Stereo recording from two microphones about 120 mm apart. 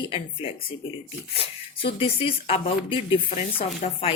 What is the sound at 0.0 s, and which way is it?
Speech, 50° left (ahead or behind).